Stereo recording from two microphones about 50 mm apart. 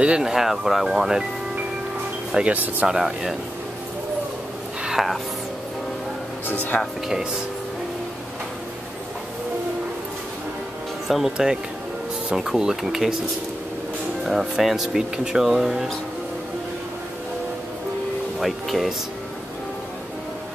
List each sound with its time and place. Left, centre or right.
0.0 s speech: centre
0.3 s speech: centre
2.5 s speech: right
2.9 s speech: centre
4.8 s speech: centre
6.7 s speech: centre
11.1 s speech: centre
14.2 s speech: centre
18.4 s speech: centre